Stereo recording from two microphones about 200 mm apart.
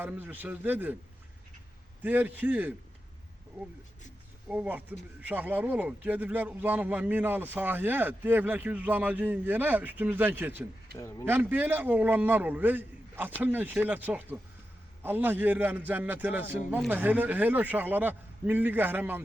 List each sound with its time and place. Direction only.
0.0 s speech: 10° right (ahead or behind)
2.0 s speech: 10° right (ahead or behind)
4.4 s speech: 5° right (ahead or behind)
10.9 s speech: 15° left (ahead or behind)
11.3 s speech: 10° right (ahead or behind)